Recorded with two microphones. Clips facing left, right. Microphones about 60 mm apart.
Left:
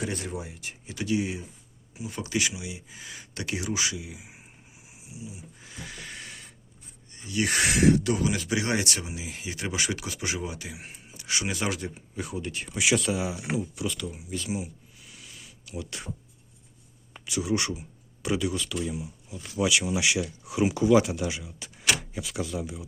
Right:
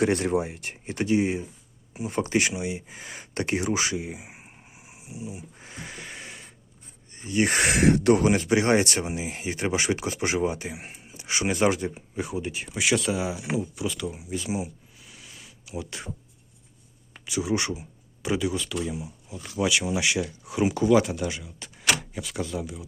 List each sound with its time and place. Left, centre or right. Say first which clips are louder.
0.0 s speech: right 10 dB; right
5.0 s dog: right 5 dB; right; by 6.5 s centre
7.1 s speech: right 4 dB; right; by 16.0 s centre
17.2 s speech: right 1 dB; centre
22.6 s speech: even; centre